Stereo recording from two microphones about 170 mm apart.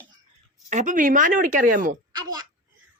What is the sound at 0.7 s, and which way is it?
Speech, 45° right (ahead or behind).